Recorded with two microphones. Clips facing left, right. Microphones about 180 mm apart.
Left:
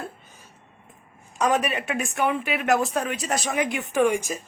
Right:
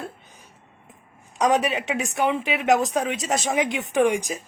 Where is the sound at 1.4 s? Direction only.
15° right (ahead or behind).